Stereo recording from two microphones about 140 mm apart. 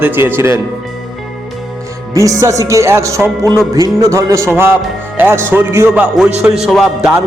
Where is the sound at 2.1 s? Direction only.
25° right (ahead or behind).